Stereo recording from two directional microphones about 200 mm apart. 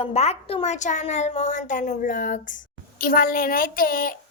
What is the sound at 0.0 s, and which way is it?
A woman's voice, 30° left (ahead or behind).